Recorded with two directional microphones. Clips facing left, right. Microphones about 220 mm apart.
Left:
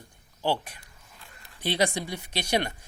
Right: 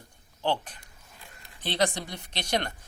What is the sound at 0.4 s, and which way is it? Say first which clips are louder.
A woman's voice: left 1 dB; 10° left (ahead or behind).